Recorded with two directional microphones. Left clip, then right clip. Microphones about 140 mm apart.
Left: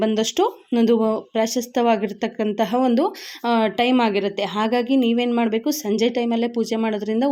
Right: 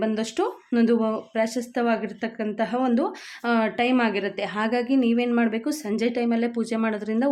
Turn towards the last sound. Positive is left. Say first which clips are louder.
# left 4 dB
turn(degrees=20)  # may be behind; listen again after turning